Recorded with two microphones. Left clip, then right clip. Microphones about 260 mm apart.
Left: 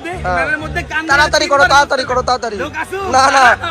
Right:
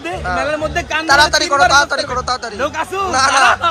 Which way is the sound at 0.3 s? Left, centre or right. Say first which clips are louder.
Left 3 dB; centre.